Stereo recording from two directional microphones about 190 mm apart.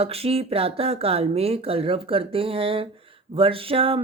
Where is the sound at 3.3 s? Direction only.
30° right (ahead or behind).